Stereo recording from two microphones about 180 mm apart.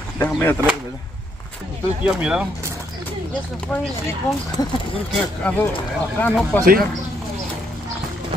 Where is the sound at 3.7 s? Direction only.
5° left (ahead or behind).